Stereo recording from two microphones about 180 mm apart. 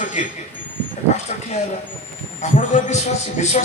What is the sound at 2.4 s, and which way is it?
A man's voice, 40° left (ahead or behind).